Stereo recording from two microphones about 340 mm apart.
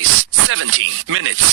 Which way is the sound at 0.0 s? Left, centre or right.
Right.